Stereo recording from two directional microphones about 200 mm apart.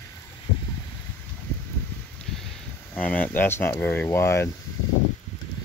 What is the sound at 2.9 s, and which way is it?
Speech, 5° left (ahead or behind).